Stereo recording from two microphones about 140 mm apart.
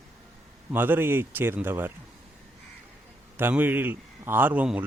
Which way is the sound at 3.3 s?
15° right (ahead or behind).